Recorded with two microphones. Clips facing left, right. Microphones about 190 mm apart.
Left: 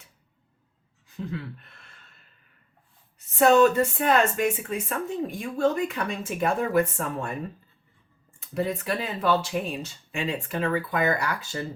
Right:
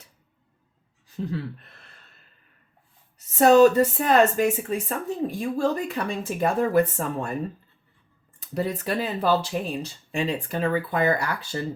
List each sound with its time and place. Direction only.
1.1 s a sound: 35° right (ahead or behind)
3.2 s speech: 40° right (ahead or behind)
8.4 s speech: 35° right (ahead or behind)